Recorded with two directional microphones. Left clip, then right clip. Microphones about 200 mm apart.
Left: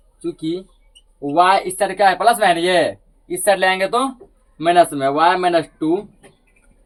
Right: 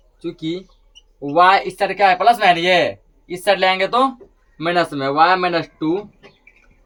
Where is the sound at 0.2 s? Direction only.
20° right (ahead or behind).